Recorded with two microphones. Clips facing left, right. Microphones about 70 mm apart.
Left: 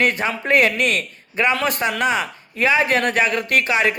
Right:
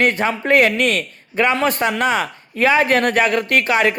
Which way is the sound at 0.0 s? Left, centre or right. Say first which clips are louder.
Right 3 dB; right.